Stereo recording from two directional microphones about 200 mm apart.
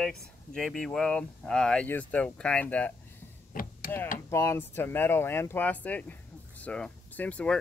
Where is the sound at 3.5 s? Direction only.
45° left (ahead or behind).